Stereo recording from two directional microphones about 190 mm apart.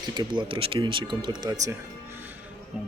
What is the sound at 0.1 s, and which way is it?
A man's voice, 25° right (ahead or behind).